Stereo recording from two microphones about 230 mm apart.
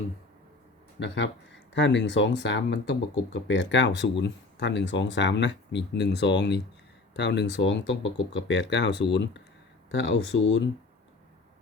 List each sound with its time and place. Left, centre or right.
0.9 s speech: left